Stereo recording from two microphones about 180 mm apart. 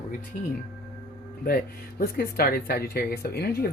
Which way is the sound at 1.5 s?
55° left (ahead or behind).